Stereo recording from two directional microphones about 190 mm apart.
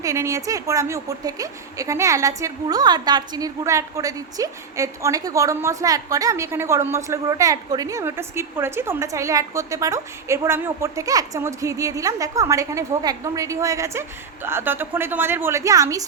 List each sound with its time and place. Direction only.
0.0 s a woman's voice: 15° right (ahead or behind)